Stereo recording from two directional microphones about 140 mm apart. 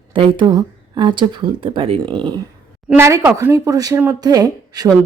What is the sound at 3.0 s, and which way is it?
Speech, 20° right (ahead or behind).